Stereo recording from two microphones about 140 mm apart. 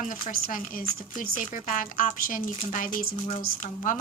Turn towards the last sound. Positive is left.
turn(degrees=65)  # may be behind; listen again after turning